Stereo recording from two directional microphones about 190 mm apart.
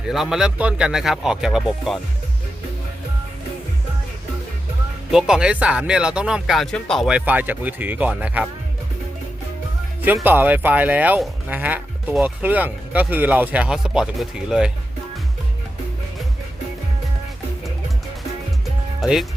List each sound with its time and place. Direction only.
0.1 s speech: centre (ahead or behind)
5.1 s speech: 5° right (ahead or behind)
10.0 s speech: 10° right (ahead or behind)
19.0 s speech: centre (ahead or behind)